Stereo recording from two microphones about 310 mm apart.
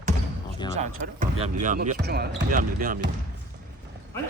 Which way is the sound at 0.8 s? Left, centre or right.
Right.